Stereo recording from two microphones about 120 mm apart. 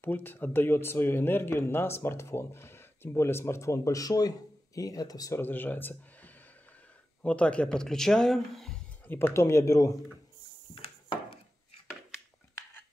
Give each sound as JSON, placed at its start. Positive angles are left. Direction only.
{"t": 0.0, "sound": "speech", "side_deg": 15}
{"t": 5.4, "sound": "speech", "side_deg": 15}
{"t": 9.0, "sound": "speech", "side_deg": 15}
{"t": 10.7, "sound": "wood", "side_deg": 45}